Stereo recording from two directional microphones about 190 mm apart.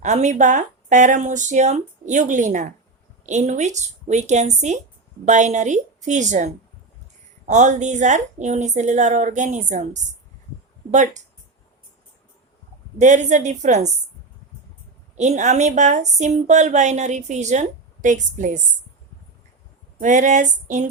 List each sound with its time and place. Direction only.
0.0 s speech: 40° right (ahead or behind)
13.0 s speech: 40° right (ahead or behind)
15.1 s speech: 40° right (ahead or behind)
20.0 s speech: 40° right (ahead or behind)